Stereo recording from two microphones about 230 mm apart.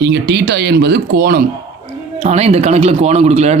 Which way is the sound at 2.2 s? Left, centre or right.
Right.